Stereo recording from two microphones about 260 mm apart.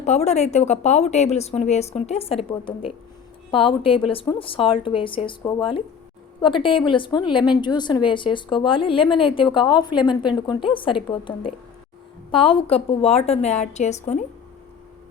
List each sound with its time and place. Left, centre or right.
0.0 s a woman's voice: left